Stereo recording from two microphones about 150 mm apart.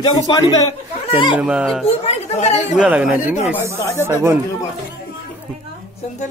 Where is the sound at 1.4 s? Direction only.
5° right (ahead or behind).